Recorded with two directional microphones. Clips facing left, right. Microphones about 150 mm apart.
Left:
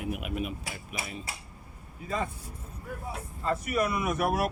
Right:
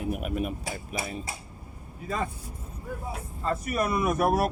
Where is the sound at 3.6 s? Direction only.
40° right (ahead or behind).